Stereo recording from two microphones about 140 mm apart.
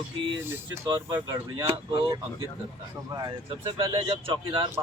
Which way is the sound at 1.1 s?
25° right (ahead or behind).